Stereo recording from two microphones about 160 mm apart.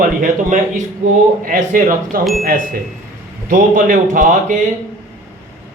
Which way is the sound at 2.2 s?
Centre (ahead or behind).